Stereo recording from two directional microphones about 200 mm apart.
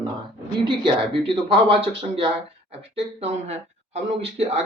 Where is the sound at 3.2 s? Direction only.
30° right (ahead or behind).